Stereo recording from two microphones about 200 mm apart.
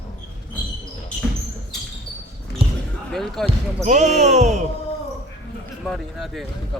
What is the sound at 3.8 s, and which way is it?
Speech, 35° right (ahead or behind).